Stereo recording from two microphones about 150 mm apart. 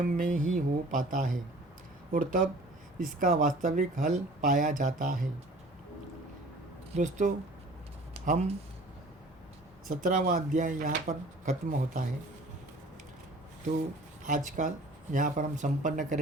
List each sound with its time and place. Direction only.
0.0 s speech: 60° right (ahead or behind)
6.9 s speech: 55° right (ahead or behind)
10.0 s speech: 65° right (ahead or behind)
14.6 s speech: 60° right (ahead or behind)